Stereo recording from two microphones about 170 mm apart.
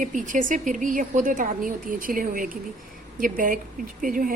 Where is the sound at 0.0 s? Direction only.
50° right (ahead or behind).